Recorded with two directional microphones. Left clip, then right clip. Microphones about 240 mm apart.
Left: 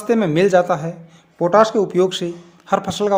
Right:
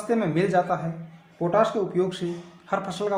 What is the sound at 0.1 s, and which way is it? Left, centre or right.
A man's voice, left.